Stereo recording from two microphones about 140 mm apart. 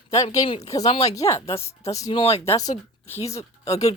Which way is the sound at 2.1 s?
40° left (ahead or behind).